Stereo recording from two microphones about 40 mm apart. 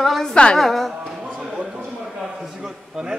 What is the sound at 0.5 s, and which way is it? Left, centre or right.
Speech, centre.